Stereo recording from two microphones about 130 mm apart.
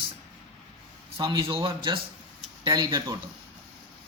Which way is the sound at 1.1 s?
35° right (ahead or behind).